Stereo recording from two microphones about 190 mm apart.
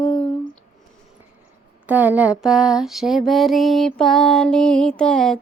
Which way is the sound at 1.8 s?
10° right (ahead or behind).